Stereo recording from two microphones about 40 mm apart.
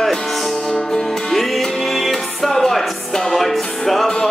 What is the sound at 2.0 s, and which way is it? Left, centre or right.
Music, centre.